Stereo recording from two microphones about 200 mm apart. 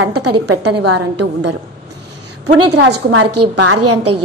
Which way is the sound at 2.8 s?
60° right (ahead or behind).